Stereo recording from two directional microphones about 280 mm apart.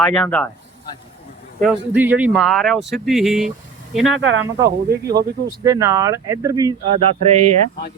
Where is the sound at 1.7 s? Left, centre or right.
Centre.